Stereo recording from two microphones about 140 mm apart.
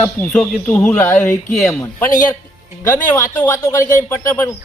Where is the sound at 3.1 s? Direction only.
15° left (ahead or behind).